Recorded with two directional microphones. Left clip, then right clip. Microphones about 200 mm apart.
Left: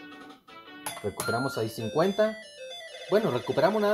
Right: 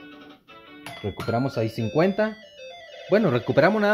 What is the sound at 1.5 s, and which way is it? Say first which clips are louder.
Speech: right 4 dB; 40° right (ahead or behind).